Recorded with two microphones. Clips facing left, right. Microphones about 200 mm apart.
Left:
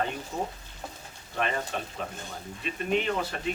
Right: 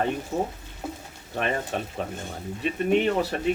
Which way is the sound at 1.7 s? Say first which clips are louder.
Right 5 dB; 55° right (ahead or behind).